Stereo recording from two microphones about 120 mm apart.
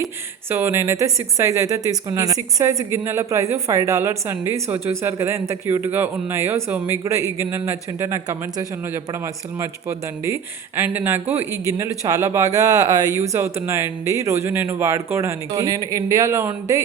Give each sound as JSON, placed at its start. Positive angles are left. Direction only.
{"t": 0.5, "sound": "speech", "side_deg": -20}